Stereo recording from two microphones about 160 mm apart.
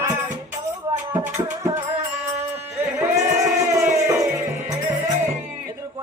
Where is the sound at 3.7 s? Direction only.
15° right (ahead or behind).